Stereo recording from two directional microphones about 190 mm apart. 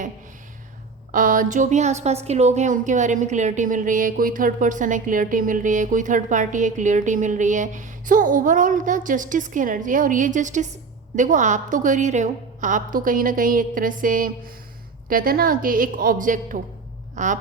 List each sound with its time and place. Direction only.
1.1 s a woman's voice: 45° right (ahead or behind)
17.2 s quack: 40° right (ahead or behind)